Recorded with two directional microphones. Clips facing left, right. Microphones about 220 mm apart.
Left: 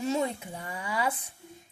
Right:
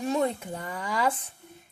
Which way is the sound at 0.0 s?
55° right (ahead or behind).